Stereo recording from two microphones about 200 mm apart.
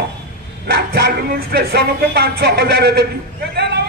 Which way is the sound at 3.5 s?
55° right (ahead or behind).